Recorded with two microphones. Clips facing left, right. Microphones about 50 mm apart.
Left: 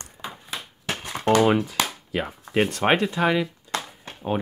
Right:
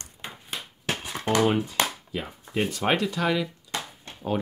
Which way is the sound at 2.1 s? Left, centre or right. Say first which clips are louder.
Left 6 dB; left.